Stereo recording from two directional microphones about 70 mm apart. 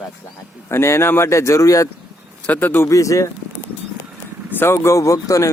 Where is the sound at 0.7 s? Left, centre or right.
Left.